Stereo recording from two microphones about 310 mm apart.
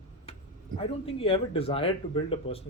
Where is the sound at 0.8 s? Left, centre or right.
Centre.